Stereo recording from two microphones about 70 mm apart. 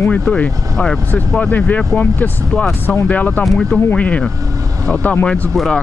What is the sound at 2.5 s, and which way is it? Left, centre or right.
Speech, centre.